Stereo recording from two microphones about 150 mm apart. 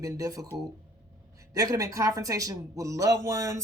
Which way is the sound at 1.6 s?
25° right (ahead or behind).